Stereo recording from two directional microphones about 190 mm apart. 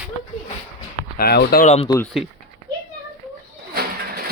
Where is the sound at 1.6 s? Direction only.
35° left (ahead or behind).